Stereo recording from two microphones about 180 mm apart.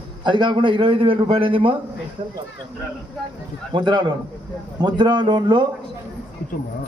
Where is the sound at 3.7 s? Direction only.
25° right (ahead or behind).